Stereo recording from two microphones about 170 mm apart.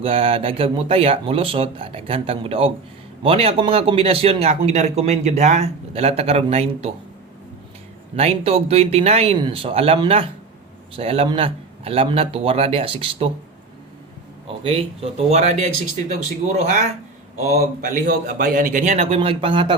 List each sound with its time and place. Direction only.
0.0 s a man's voice: 35° right (ahead or behind)
8.1 s a man's voice: 40° right (ahead or behind)
14.4 s a man's voice: 30° right (ahead or behind)
17.5 s a man's voice: 55° right (ahead or behind); by 19.7 s 30° right (ahead or behind)